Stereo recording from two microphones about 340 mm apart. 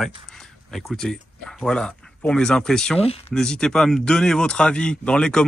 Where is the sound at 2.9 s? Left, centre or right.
Centre.